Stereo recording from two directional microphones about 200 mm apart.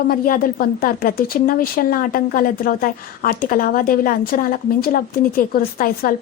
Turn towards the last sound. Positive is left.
turn(degrees=45)  # may be behind; listen again after turning